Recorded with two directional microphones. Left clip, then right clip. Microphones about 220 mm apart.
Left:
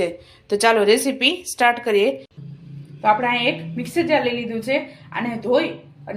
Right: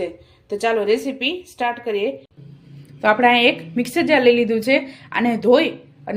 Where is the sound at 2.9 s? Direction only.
45° right (ahead or behind).